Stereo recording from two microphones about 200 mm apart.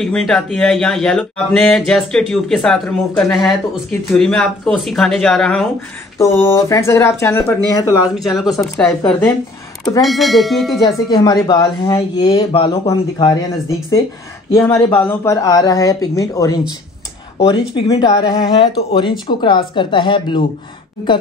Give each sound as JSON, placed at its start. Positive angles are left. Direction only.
{"t": 0.0, "sound": "speech", "side_deg": 0}
{"t": 6.1, "sound": "speech", "side_deg": 15}
{"t": 8.2, "sound": "speech", "side_deg": 0}
{"t": 10.9, "sound": "speech", "side_deg": 20}